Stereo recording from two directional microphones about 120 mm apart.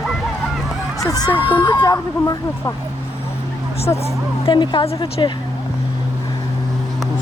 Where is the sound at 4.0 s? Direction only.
45° left (ahead or behind).